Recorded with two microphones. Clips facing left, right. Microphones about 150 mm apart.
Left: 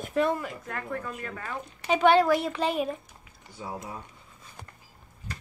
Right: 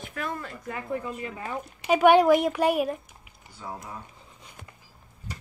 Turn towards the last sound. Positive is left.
turn(degrees=-15)  # may be behind; listen again after turning